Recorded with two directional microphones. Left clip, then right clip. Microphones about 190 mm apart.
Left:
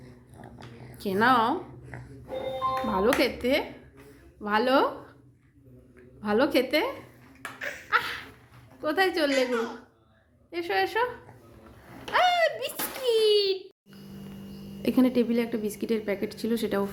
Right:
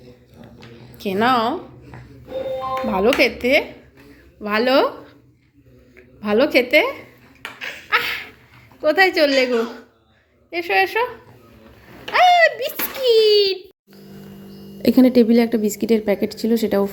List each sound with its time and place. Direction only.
0.9 s speech: 5° left (ahead or behind)
2.8 s speech: 5° left (ahead or behind)
6.2 s speech: centre (ahead or behind)
7.9 s a sound: 5° right (ahead or behind)
8.8 s speech: 5° right (ahead or behind)
10.5 s speech: centre (ahead or behind)
12.1 s a sound: 5° left (ahead or behind)
14.8 s a woman's voice: 25° right (ahead or behind)